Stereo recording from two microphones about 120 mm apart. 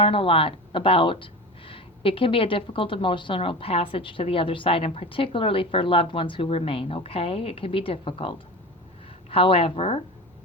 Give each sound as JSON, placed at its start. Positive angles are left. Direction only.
{"t": 0.0, "sound": "speech", "side_deg": 50}